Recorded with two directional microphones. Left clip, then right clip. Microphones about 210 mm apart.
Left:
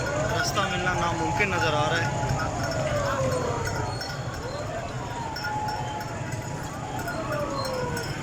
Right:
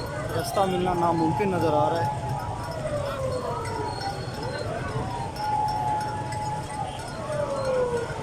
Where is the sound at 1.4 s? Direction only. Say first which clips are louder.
Left 2 dB; 30° right (ahead or behind).